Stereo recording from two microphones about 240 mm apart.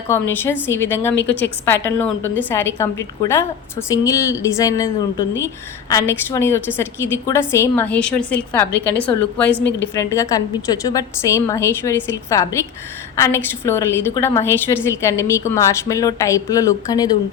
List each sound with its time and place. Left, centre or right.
0.1 s a woman's voice: centre
1.1 s a woman's voice: left
1.6 s a woman's voice: centre
5.9 s a woman's voice: centre
9.5 s a woman's voice: left
9.8 s a woman's voice: centre